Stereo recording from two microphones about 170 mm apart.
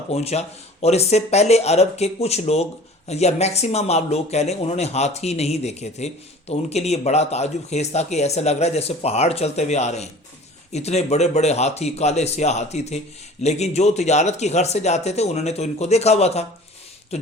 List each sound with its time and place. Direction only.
0.1 s speech: 40° left (ahead or behind)